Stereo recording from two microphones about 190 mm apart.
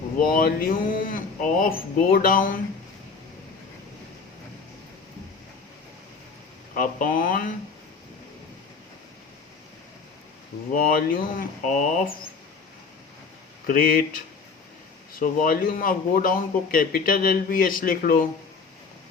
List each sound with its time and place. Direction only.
0.3 s speech: 50° left (ahead or behind)
6.7 s speech: 45° left (ahead or behind)
10.7 s speech: 45° left (ahead or behind)
13.7 s speech: 50° left (ahead or behind)